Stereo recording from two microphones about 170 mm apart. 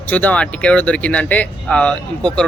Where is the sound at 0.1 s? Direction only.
10° left (ahead or behind).